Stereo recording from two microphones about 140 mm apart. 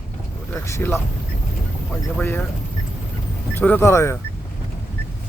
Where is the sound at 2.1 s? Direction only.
15° left (ahead or behind).